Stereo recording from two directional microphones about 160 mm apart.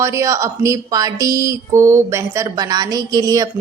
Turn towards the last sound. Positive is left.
turn(degrees=-20)  # may be behind; listen again after turning